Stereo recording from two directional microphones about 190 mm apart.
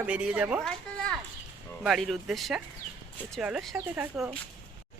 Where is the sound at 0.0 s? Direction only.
5° right (ahead or behind).